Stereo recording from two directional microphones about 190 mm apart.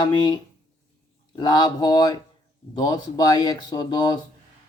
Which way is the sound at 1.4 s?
20° left (ahead or behind).